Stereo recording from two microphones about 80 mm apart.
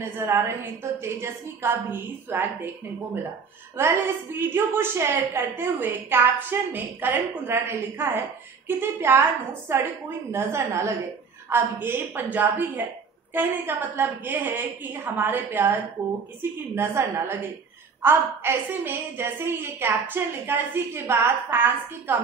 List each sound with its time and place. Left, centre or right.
0.0 s a woman's voice: right
3.7 s a woman's voice: right